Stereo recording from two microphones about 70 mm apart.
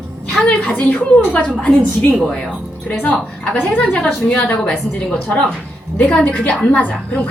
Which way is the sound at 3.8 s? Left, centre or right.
Centre.